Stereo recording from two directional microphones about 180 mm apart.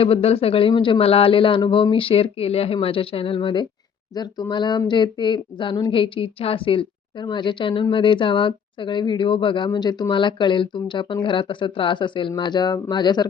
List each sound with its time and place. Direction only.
0.0 s speech: 30° left (ahead or behind)